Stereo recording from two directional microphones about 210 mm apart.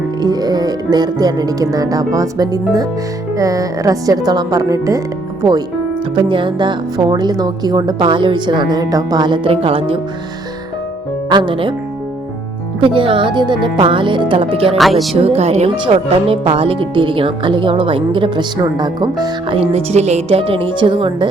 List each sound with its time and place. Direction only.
0.2 s speech: 20° right (ahead or behind)
11.3 s speech: 20° right (ahead or behind)
12.8 s speech: 25° right (ahead or behind)
14.8 s speech: centre (ahead or behind)
15.1 s speech: 30° right (ahead or behind)